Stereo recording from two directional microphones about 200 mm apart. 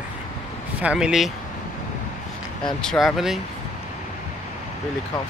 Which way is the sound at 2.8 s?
Centre (ahead or behind).